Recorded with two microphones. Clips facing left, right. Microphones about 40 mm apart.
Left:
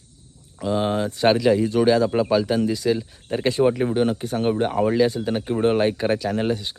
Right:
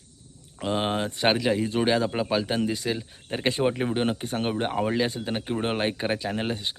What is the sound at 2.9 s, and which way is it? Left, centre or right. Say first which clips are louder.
Speech: left 6 dB; centre.